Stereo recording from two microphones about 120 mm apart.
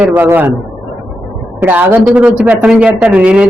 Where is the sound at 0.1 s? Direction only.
20° right (ahead or behind).